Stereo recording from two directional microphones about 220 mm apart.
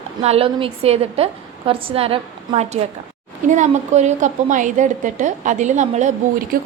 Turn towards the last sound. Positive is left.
turn(degrees=-40)  # may be behind; listen again after turning